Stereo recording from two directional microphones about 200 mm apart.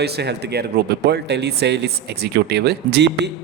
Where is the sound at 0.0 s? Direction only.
55° right (ahead or behind).